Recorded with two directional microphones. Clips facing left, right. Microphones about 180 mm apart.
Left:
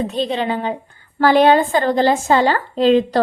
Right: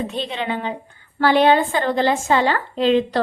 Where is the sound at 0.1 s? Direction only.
35° left (ahead or behind).